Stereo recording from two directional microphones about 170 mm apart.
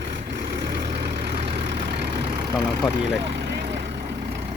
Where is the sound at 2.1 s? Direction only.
35° right (ahead or behind).